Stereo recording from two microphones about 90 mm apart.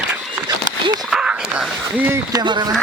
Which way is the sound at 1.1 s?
10° right (ahead or behind).